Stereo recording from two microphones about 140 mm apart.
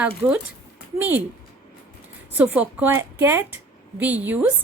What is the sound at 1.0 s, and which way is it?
Speech, 15° right (ahead or behind).